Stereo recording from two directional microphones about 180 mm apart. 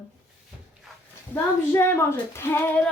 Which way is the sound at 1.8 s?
15° left (ahead or behind).